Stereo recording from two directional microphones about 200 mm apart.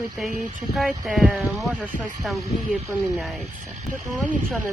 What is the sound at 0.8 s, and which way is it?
Speech, centre (ahead or behind).